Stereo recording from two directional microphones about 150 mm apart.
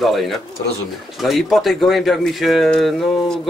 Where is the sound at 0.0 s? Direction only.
Centre (ahead or behind).